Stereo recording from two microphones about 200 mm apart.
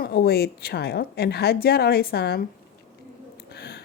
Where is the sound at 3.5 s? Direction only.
50° left (ahead or behind).